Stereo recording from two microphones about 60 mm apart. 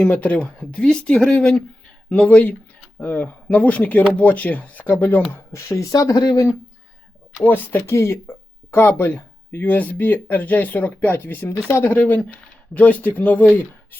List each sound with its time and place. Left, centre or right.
0.0 s speech: left
5.3 s speech: left
5.5 s speech: left
7.4 s speech: left
7.8 s speech: left